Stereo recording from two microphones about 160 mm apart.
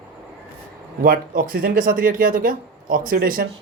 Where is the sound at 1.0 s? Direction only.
65° right (ahead or behind).